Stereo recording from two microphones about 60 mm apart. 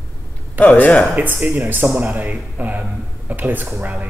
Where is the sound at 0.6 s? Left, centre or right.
Left.